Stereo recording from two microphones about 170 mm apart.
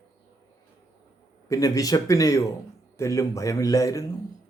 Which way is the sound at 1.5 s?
20° left (ahead or behind).